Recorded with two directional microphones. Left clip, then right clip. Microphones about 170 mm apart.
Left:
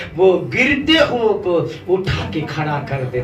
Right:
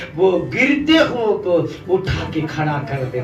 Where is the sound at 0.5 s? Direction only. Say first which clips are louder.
Even; 40° left (ahead or behind).